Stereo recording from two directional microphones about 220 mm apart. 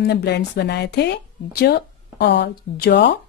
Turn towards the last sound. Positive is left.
turn(degrees=50)  # may be behind; listen again after turning